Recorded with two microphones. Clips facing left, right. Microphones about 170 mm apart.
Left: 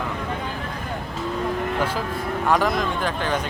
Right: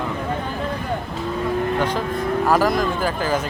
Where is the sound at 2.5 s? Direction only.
5° right (ahead or behind).